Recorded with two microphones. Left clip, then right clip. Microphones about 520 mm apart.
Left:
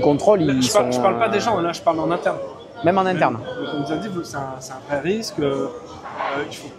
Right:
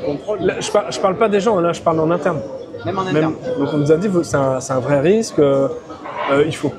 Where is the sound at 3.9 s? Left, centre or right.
Right.